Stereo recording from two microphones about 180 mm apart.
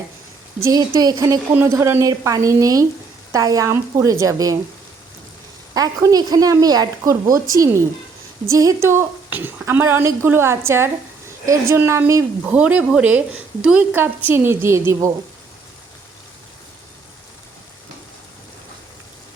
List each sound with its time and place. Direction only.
0.6 s a woman's voice: 20° right (ahead or behind)
5.7 s a woman's voice: 20° right (ahead or behind)